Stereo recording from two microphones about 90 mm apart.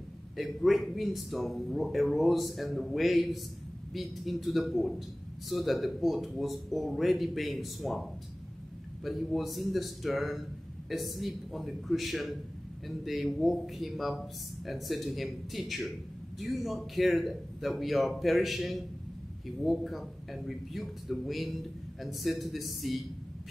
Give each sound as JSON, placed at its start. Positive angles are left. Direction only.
{"t": 0.4, "sound": "a man's voice", "side_deg": 0}